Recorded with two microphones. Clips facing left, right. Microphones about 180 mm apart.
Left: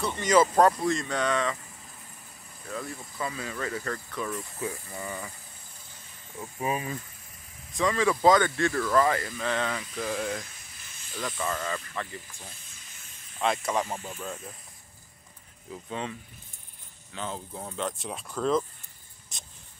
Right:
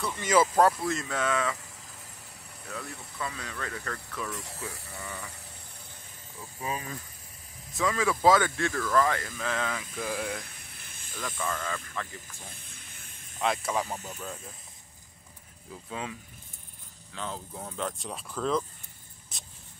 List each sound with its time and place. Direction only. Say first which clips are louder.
0.0 s speech: left 2 dB; 5° right (ahead or behind)
2.7 s speech: left 4 dB; centre (ahead or behind)
4.6 s speech: left 8 dB; 15° left (ahead or behind)
6.6 s speech: left 5 dB; 15° left (ahead or behind)
7.7 s speech: left 3 dB; centre (ahead or behind)
10.4 s a sound: even; 60° right (ahead or behind)
11.1 s speech: left 2 dB; 5° left (ahead or behind)
12.4 s vehicle: right 1 dB; 55° right (ahead or behind)
13.4 s speech: left 2 dB; centre (ahead or behind)
15.7 s speech: left 3 dB; 5° right (ahead or behind)